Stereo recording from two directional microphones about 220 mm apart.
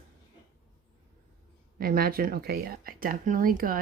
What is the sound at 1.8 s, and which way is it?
Speech, 40° right (ahead or behind).